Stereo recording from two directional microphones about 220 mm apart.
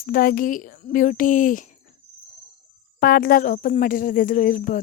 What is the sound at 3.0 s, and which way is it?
A woman's voice, 45° left (ahead or behind).